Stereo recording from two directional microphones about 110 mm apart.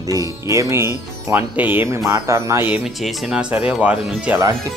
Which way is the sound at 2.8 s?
Centre (ahead or behind).